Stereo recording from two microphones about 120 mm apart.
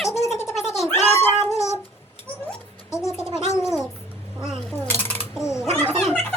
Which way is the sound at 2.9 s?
25° left (ahead or behind).